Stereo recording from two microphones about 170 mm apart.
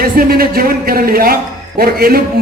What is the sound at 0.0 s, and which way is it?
A man's voice, 60° right (ahead or behind).